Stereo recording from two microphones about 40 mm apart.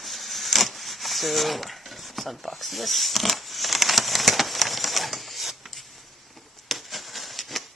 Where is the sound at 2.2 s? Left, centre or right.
Centre.